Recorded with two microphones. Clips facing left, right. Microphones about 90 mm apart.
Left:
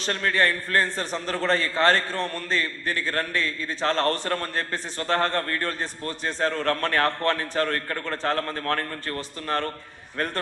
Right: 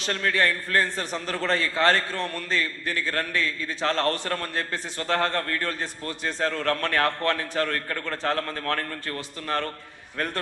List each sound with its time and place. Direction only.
0.0 s a man's voice: 40° left (ahead or behind)